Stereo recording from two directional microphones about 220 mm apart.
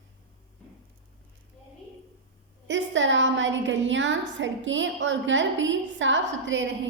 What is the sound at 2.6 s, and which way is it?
A woman's voice, 55° right (ahead or behind).